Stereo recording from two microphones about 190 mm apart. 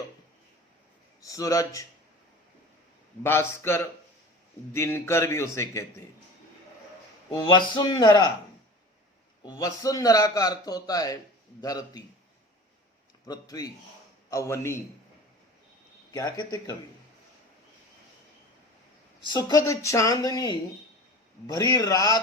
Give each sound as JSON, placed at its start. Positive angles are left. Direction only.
{"t": 1.2, "sound": "speech", "side_deg": 20}
{"t": 3.2, "sound": "a man's voice", "side_deg": 15}
{"t": 7.3, "sound": "a man's voice", "side_deg": 25}
{"t": 9.5, "sound": "a man's voice", "side_deg": 20}
{"t": 13.2, "sound": "a man's voice", "side_deg": 20}
{"t": 16.1, "sound": "a man's voice", "side_deg": 20}
{"t": 19.3, "sound": "a man's voice", "side_deg": 20}